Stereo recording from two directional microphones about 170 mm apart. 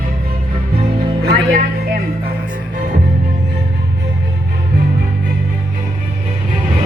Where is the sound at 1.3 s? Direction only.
60° right (ahead or behind).